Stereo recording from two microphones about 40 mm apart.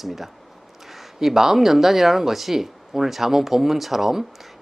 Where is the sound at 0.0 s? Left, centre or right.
Centre.